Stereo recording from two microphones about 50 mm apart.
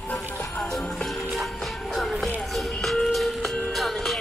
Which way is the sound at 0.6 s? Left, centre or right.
Centre.